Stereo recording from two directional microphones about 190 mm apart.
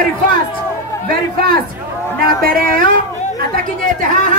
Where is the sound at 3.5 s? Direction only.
45° right (ahead or behind).